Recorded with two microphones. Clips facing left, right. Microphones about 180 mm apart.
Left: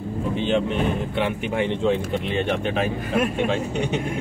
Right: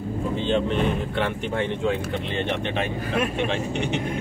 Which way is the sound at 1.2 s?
15° left (ahead or behind).